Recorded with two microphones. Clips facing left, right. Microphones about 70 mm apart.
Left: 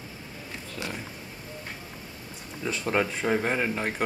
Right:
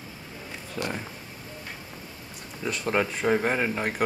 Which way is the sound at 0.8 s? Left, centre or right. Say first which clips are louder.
Right 5 dB; right.